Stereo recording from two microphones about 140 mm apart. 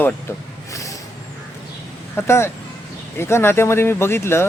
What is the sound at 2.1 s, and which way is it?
Speech, 20° left (ahead or behind).